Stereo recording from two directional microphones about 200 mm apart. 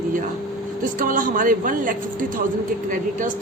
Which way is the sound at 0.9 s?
40° right (ahead or behind).